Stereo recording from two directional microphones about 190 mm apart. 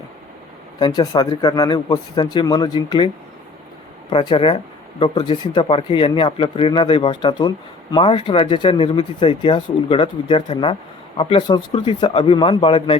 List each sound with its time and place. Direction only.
0.8 s speech: 25° left (ahead or behind)
4.1 s speech: 25° left (ahead or behind)